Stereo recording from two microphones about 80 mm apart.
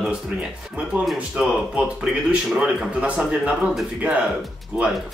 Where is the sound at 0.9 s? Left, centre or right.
Right.